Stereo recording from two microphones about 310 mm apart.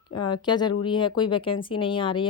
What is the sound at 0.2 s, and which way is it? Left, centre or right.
Speech, centre.